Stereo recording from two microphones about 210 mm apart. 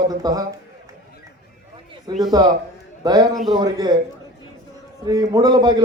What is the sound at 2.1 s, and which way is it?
A man's voice, 20° right (ahead or behind).